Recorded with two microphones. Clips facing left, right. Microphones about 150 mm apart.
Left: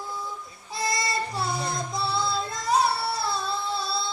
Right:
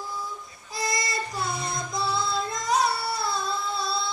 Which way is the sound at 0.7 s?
30° left (ahead or behind).